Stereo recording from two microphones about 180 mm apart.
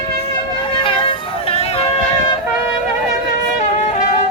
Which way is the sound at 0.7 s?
30° left (ahead or behind).